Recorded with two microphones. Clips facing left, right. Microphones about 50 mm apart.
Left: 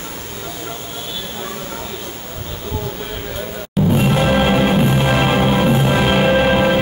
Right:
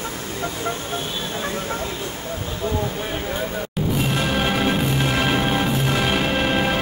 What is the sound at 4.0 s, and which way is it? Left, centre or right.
Music, left.